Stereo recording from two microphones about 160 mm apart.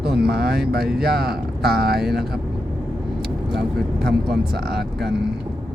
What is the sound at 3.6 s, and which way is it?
Speech, 90° right.